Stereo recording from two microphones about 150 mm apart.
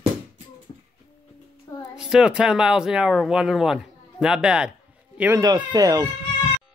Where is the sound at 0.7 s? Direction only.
30° left (ahead or behind).